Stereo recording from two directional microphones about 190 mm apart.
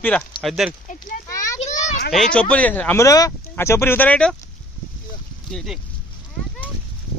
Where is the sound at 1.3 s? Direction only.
15° left (ahead or behind).